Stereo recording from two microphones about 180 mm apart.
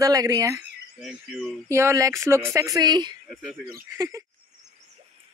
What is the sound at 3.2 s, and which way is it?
Cricket, centre (ahead or behind).